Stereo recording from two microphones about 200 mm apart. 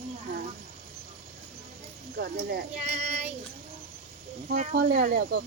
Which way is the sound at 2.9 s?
35° right (ahead or behind).